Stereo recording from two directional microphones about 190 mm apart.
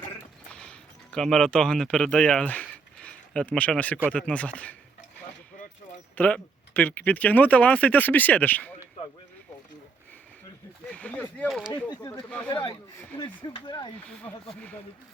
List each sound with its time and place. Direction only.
0.5 s speech: 5° left (ahead or behind)
6.1 s speech: 10° left (ahead or behind)
10.8 s speech: 5° left (ahead or behind)
11.9 s speech: 25° left (ahead or behind)